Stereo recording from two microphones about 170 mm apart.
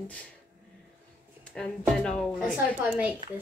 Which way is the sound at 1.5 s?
5° left (ahead or behind).